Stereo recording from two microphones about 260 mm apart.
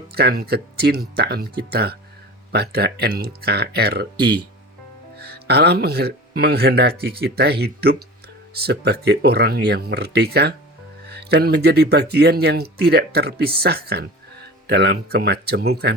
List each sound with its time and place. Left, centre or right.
0.1 s speech: right